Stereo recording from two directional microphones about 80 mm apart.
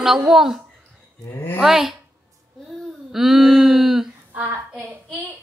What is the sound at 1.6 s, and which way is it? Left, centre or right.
Speech, centre.